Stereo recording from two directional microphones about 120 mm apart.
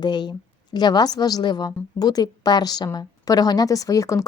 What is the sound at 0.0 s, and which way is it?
A woman's voice, 35° left (ahead or behind).